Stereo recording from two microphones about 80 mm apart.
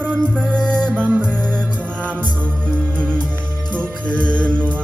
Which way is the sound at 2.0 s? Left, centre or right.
Right.